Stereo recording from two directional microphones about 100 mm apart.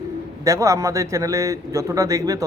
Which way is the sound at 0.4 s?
30° right (ahead or behind).